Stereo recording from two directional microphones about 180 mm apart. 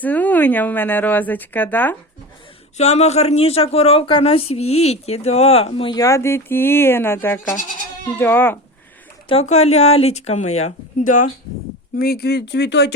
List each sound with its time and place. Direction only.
0.0 s a woman's voice: 10° left (ahead or behind)
2.7 s a woman's voice: 35° left (ahead or behind); by 8.5 s 10° left (ahead or behind)
9.3 s speech: 35° left (ahead or behind)
11.9 s speech: 60° left (ahead or behind)